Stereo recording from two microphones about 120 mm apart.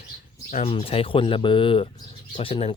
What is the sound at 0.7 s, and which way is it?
Speech, 50° left (ahead or behind).